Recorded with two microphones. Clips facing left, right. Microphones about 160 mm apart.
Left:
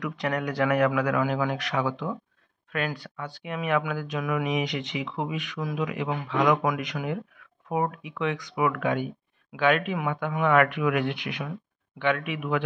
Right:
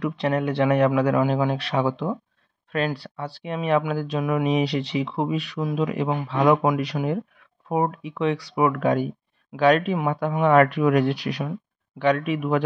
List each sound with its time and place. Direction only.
0.0 s speech: 30° right (ahead or behind)